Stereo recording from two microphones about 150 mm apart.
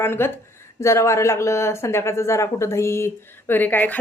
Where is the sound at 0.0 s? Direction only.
15° left (ahead or behind).